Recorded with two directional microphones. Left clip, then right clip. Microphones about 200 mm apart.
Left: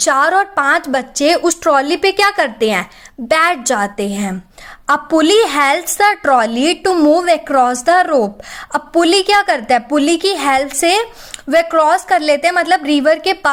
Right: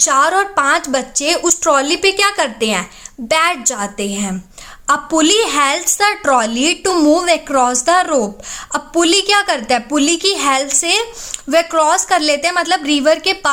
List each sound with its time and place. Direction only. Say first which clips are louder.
0.0 s a woman's voice: left 1 dB; 20° left (ahead or behind)